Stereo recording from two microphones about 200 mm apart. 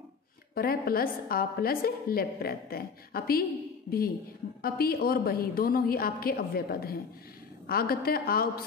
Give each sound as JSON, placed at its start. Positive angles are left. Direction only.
{"t": 0.6, "sound": "a woman's voice", "side_deg": 50}
{"t": 4.6, "sound": "a woman's voice", "side_deg": 50}